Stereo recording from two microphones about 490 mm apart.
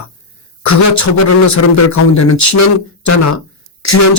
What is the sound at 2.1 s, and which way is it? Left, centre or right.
A man's voice, left.